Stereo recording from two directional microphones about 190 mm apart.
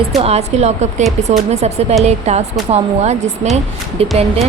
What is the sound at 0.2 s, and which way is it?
Speech, 35° right (ahead or behind).